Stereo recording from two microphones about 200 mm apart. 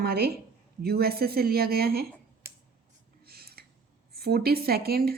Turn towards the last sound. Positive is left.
turn(degrees=-50)  # may be behind; listen again after turning